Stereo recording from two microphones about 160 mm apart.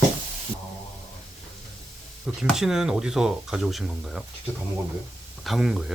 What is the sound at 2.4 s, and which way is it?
Speech, 5° right (ahead or behind).